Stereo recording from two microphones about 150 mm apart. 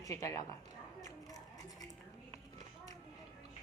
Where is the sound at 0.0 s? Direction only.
20° left (ahead or behind).